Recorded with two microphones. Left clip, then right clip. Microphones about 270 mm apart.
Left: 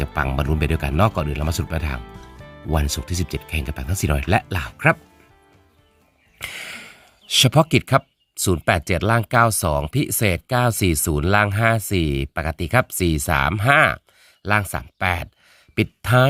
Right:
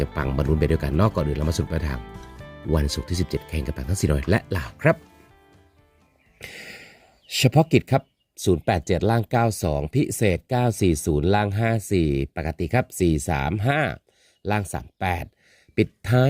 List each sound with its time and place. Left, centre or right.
0.0 s speech: centre
6.4 s speech: centre